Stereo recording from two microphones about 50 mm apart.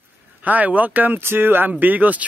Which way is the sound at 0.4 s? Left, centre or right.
Right.